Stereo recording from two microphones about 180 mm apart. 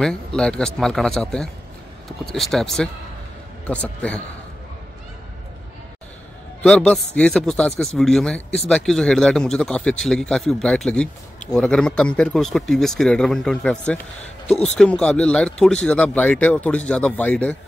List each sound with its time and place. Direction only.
0.0 s a man's voice: 5° left (ahead or behind)
6.6 s a man's voice: 5° left (ahead or behind)